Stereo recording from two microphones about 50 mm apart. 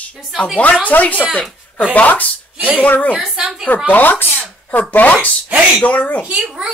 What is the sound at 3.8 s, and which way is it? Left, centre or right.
Speech, left.